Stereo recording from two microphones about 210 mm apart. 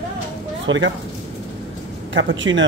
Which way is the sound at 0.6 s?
65° right (ahead or behind).